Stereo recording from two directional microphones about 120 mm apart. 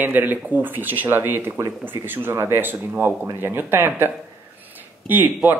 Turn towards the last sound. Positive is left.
turn(degrees=-15)  # may be behind; listen again after turning